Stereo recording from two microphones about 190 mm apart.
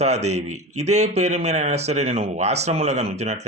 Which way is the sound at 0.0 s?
35° right (ahead or behind).